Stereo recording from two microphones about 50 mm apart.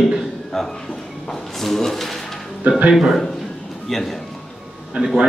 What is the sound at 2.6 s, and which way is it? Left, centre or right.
Speech, right.